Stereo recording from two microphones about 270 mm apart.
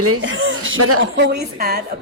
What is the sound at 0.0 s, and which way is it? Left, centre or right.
Speech, right.